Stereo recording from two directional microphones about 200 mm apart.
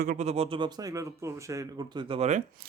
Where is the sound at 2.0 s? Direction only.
30° right (ahead or behind).